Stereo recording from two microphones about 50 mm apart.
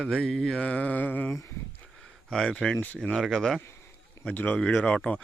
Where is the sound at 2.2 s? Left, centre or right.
Centre.